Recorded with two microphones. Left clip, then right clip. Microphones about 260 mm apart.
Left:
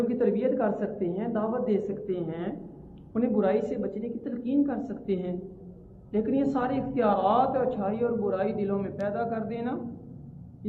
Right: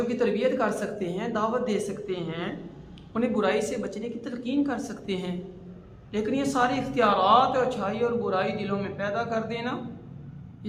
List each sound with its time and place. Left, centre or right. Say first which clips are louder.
0.1 s a man's voice: right 1 dB; centre